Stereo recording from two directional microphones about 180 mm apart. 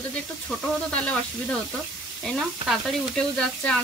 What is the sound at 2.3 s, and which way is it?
Speech, centre (ahead or behind).